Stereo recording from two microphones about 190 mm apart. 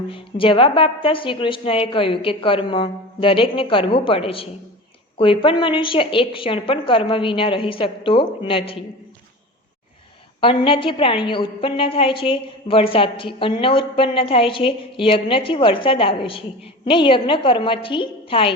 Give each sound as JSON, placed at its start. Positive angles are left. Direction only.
{"t": 0.1, "sound": "a woman's voice", "side_deg": 30}
{"t": 10.4, "sound": "a woman's voice", "side_deg": 25}